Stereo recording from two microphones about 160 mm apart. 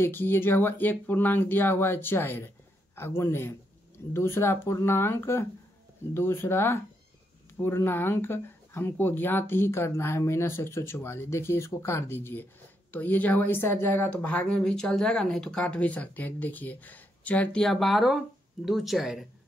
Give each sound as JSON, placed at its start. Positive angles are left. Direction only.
{"t": 0.0, "sound": "speech", "side_deg": 15}